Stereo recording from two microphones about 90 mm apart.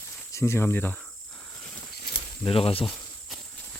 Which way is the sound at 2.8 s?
5° left (ahead or behind).